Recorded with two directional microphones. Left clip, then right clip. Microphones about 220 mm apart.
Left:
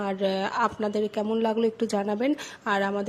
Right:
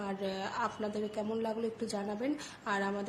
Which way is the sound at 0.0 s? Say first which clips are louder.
Left 11 dB; 40° left (ahead or behind).